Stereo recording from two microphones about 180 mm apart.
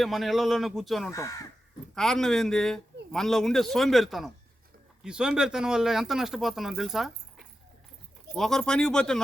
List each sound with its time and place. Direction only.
0.0 s speech: centre (ahead or behind)
1.1 s speech: 15° left (ahead or behind)
2.0 s speech: centre (ahead or behind)